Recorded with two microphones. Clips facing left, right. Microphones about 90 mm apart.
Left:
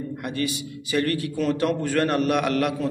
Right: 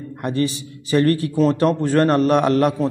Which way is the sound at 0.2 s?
35° right (ahead or behind).